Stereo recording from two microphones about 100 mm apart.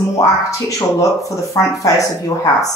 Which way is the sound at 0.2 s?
35° left (ahead or behind).